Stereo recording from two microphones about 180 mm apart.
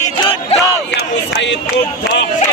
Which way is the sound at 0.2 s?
25° left (ahead or behind).